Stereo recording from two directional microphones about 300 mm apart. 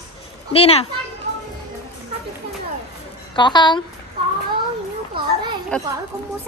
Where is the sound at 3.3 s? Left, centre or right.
Centre.